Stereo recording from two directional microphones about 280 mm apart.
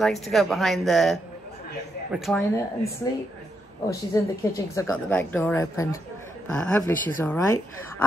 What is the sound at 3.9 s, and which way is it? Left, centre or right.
A woman's voice, centre.